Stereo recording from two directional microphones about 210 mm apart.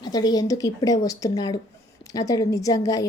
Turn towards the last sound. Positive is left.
turn(degrees=15)  # may be behind; listen again after turning